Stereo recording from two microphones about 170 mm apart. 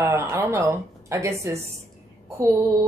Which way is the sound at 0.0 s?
15° right (ahead or behind).